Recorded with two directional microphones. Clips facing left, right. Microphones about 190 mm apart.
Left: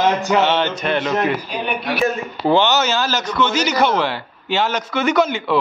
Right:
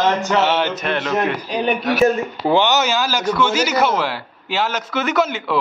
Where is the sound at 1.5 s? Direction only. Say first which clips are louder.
Right 4 dB; 40° right (ahead or behind).